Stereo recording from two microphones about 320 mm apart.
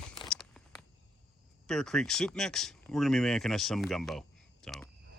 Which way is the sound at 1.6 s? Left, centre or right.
Centre.